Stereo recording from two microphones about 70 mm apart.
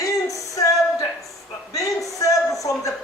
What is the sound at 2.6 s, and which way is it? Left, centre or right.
Speech, left.